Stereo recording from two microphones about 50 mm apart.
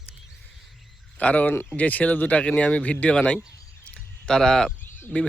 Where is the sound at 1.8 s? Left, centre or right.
Left.